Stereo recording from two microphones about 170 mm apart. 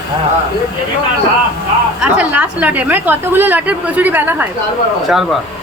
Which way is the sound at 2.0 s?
10° right (ahead or behind).